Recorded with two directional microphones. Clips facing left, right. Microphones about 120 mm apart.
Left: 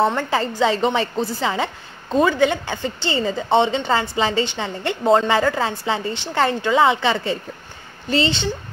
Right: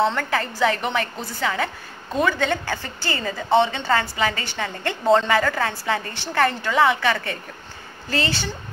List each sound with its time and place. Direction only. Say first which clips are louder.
0.0 s a woman's voice: left 2 dB; 25° left (ahead or behind)